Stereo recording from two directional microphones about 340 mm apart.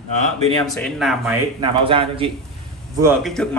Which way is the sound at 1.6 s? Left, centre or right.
Centre.